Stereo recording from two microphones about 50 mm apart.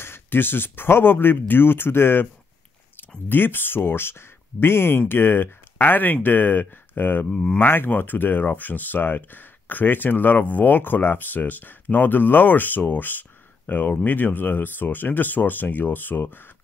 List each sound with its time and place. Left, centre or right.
0.0 s speech: left
3.3 s speech: left